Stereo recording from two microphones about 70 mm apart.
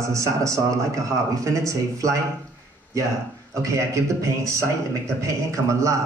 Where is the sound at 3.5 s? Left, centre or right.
Right.